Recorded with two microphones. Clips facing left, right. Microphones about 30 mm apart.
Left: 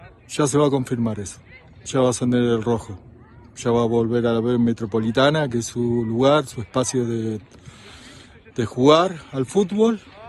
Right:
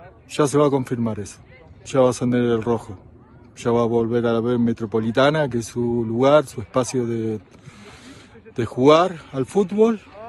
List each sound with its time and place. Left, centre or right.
0.5 s speech: left
1.0 s speech: left
2.5 s a man's voice: left
3.6 s speech: left
4.5 s a man's voice: left
4.7 s speech: left